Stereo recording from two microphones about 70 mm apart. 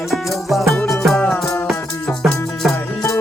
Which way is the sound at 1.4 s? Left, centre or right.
Left.